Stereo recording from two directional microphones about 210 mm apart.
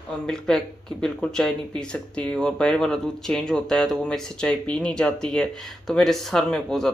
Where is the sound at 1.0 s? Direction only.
5° left (ahead or behind).